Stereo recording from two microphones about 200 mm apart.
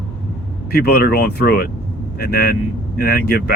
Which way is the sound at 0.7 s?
50° left (ahead or behind).